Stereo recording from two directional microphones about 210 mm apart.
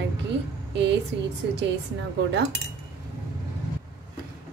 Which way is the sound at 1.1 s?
55° right (ahead or behind).